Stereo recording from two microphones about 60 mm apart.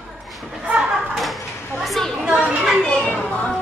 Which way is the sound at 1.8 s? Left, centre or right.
Centre.